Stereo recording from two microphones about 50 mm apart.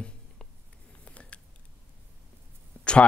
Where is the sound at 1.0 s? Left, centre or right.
Left.